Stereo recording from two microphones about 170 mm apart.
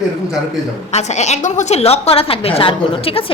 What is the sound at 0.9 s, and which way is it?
A woman's voice, 40° left (ahead or behind).